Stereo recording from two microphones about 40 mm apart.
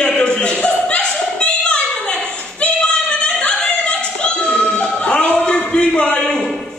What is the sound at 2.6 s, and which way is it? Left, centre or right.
Singing, left.